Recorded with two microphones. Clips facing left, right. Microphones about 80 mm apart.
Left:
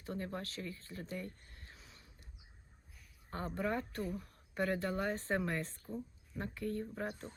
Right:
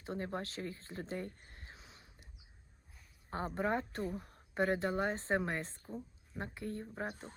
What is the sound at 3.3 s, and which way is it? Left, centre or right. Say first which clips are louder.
Speech: right 2 dB; right.